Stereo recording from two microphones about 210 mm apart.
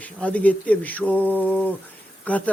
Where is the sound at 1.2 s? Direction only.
10° right (ahead or behind).